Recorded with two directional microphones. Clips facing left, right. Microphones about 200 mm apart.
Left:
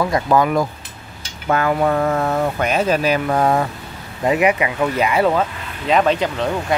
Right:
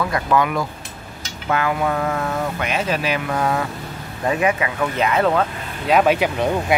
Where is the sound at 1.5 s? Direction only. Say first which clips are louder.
Left 3 dB; 40° left (ahead or behind).